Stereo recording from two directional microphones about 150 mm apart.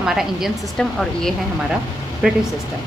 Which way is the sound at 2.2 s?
5° right (ahead or behind).